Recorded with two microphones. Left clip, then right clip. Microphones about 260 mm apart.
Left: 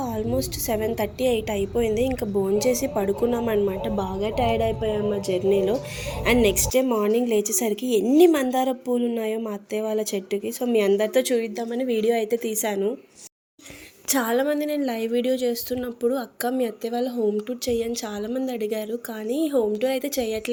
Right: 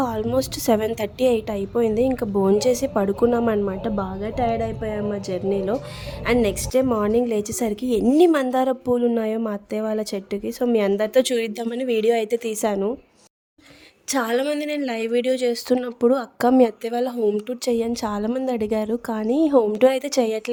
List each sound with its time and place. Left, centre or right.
0.2 s a woman's voice: right
8.0 s a woman's voice: right
8.3 s speech: right
14.1 s speech: right